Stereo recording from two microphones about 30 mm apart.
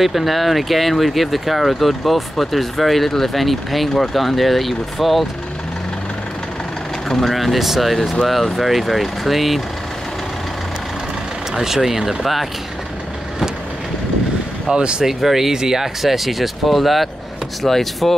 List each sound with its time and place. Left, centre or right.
0.0 s speech: centre
7.1 s speech: centre
7.3 s speech: centre
11.5 s speech: centre
14.7 s speech: right
15.0 s speech: centre
15.5 s speech: right
15.8 s speech: centre
17.6 s speech: centre